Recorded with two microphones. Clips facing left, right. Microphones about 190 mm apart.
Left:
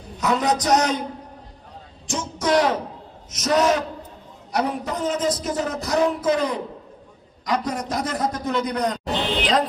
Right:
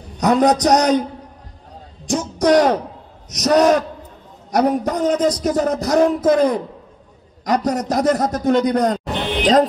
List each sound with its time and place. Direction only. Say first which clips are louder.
0.2 s a man's voice: right 7 dB; 40° right (ahead or behind)
2.0 s a man's voice: right 7 dB; 45° right (ahead or behind)